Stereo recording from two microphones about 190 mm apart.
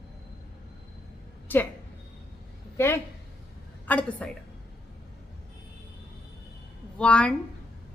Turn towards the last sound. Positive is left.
turn(degrees=5)  # may be behind; listen again after turning